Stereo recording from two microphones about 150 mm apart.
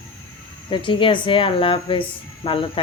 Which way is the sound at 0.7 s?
35° left (ahead or behind).